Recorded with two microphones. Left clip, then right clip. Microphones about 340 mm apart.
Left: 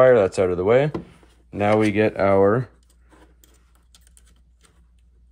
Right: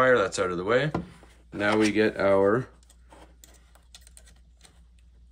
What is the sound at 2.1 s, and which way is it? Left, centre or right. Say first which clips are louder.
Speech: left 5 dB; centre.